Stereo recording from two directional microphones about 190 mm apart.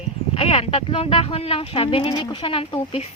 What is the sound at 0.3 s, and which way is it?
A woman's voice, 30° left (ahead or behind).